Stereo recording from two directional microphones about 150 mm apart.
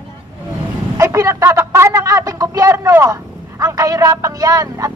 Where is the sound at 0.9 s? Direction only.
20° right (ahead or behind).